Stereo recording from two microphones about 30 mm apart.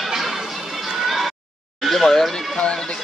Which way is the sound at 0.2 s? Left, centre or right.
Centre.